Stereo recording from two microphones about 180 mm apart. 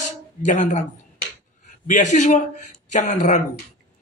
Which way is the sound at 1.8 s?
45° left (ahead or behind).